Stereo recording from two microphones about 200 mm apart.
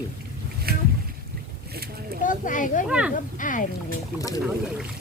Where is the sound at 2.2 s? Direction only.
40° left (ahead or behind).